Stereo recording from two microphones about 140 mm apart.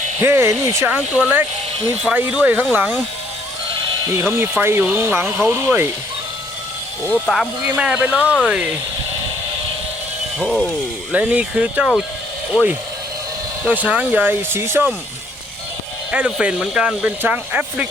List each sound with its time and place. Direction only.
0.2 s speech: 15° right (ahead or behind)
4.1 s speech: 15° right (ahead or behind)
7.1 s speech: 5° left (ahead or behind)
7.8 s speech: 10° right (ahead or behind)
10.3 s speech: 5° left (ahead or behind)
11.1 s speech: 10° right (ahead or behind)
13.7 s speech: 10° right (ahead or behind)
16.1 s speech: 10° right (ahead or behind)